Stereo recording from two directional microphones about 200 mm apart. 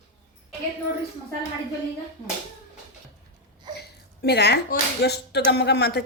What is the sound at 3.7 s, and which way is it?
Speech, 55° left (ahead or behind).